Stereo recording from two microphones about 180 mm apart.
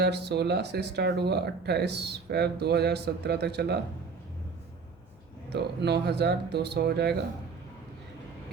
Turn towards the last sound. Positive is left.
turn(degrees=-65)  # may be behind; listen again after turning